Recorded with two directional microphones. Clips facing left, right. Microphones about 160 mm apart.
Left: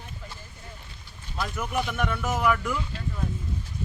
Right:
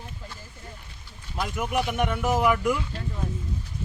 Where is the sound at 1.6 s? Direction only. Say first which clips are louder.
Right 3 dB; 15° right (ahead or behind).